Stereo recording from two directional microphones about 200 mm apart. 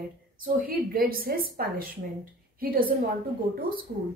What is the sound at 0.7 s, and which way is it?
A woman's voice, 45° right (ahead or behind).